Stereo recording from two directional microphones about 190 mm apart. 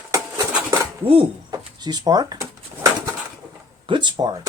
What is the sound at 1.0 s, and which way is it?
Speech, 25° right (ahead or behind).